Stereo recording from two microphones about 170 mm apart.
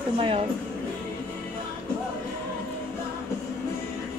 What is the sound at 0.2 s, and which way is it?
Speech, 30° right (ahead or behind).